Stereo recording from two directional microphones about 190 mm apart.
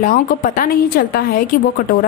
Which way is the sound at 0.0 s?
45° left (ahead or behind).